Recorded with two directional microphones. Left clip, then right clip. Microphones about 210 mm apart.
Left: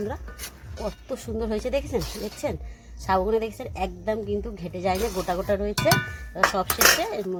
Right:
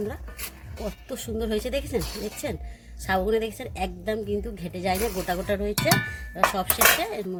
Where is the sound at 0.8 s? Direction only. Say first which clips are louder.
Left 2 dB; 15° left (ahead or behind).